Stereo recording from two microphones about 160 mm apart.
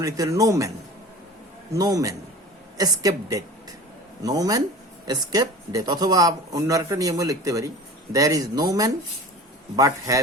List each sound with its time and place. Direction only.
0.0 s speech: 20° right (ahead or behind)
1.7 s a woman's voice: 20° right (ahead or behind)